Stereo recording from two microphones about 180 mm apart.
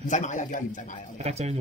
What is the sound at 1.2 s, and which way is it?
Speech, 35° right (ahead or behind).